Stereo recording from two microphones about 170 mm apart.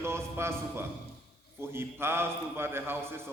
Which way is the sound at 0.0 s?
15° right (ahead or behind).